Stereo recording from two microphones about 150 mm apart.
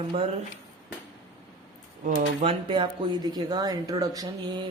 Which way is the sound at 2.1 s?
40° right (ahead or behind).